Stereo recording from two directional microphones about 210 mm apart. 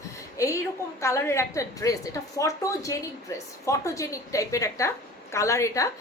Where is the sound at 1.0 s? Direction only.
15° left (ahead or behind).